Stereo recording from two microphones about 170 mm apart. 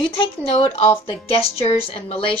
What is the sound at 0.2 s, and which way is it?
A woman's voice, 35° left (ahead or behind).